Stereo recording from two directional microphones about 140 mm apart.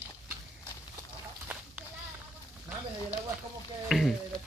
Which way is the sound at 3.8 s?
Centre (ahead or behind).